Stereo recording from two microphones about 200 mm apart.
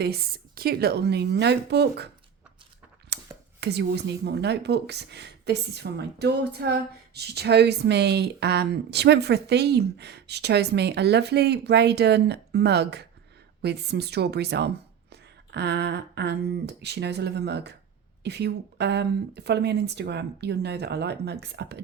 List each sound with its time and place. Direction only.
0.0 s a woman's voice: 50° right (ahead or behind)
3.1 s chopping: 55° right (ahead or behind)
3.6 s a woman's voice: 55° right (ahead or behind)